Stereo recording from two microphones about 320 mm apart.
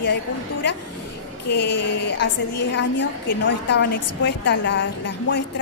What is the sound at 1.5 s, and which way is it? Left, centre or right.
A woman's voice, left.